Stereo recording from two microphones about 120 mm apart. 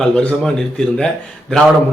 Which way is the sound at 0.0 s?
10° left (ahead or behind).